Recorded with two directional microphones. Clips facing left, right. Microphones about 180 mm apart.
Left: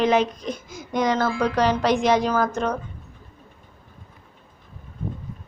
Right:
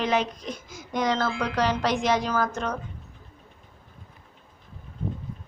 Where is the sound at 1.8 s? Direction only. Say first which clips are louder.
Left 5 dB; 20° left (ahead or behind).